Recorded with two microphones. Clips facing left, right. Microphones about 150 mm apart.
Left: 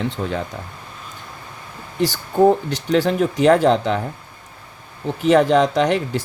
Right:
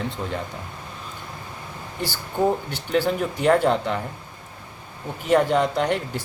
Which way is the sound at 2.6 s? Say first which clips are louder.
Left 4 dB; 90° left.